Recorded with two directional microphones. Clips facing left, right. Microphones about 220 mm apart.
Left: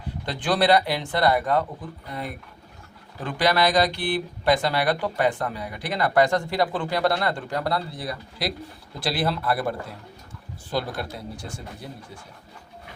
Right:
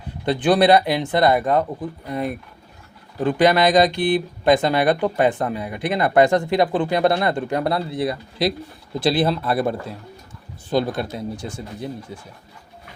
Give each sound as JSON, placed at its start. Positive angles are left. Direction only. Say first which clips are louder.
{"t": 0.3, "sound": "speech", "louder": "right 5 dB", "side_deg": -20}
{"t": 3.2, "sound": "speech", "louder": "right 6 dB", "side_deg": -20}